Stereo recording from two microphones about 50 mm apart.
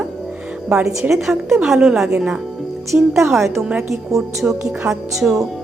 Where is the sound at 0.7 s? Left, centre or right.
Centre.